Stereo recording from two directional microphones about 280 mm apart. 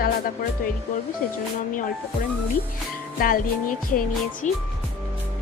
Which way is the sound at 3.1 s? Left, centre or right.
Left.